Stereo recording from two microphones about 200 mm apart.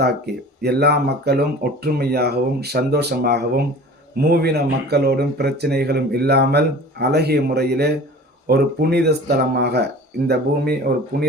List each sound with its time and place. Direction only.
0.6 s speech: 55° right (ahead or behind)